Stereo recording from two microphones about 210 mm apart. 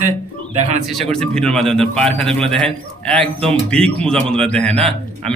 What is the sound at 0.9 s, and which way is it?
Speech, centre (ahead or behind).